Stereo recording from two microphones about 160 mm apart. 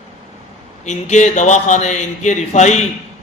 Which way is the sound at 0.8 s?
45° left (ahead or behind).